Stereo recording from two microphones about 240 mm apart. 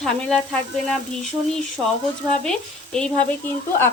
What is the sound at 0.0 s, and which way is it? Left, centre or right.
Speech, centre.